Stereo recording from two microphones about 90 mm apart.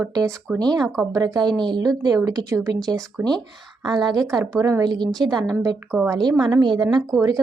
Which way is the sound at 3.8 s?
50° right (ahead or behind).